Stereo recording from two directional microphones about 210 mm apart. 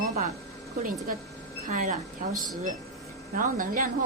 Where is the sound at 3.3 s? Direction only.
40° right (ahead or behind).